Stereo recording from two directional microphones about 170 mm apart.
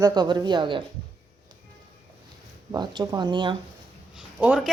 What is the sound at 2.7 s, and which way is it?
Speech, 25° right (ahead or behind).